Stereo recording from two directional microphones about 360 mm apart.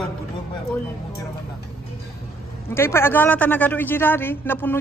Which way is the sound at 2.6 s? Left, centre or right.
Centre.